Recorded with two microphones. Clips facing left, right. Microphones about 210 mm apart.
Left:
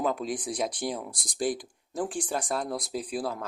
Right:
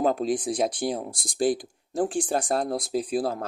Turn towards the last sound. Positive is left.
turn(degrees=-30)  # may be behind; listen again after turning